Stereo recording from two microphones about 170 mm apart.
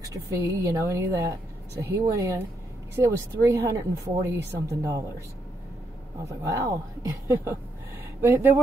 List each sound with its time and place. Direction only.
0.1 s speech: 20° right (ahead or behind)
6.2 s speech: 20° right (ahead or behind)